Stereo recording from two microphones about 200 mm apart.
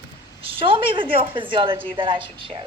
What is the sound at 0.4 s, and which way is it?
A woman's voice, 25° right (ahead or behind).